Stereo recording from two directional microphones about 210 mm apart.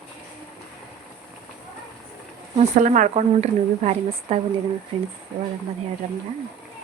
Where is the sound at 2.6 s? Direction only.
35° right (ahead or behind).